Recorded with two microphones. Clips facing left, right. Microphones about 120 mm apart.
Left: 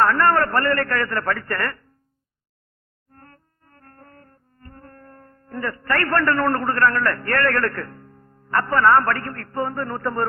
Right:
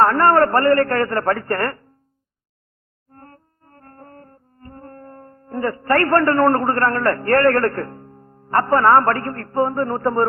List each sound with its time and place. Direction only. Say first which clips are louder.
0.0 s a man's voice: right 4 dB; 35° right (ahead or behind)
3.1 s music: right 5 dB; 35° right (ahead or behind)
6.0 s a man's voice: right 5 dB; 25° right (ahead or behind)